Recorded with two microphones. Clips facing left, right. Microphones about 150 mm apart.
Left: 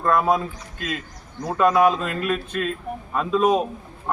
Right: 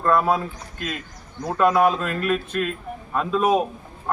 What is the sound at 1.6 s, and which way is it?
Speech, 10° right (ahead or behind).